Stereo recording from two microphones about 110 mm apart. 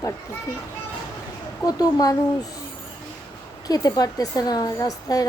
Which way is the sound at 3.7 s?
35° left (ahead or behind).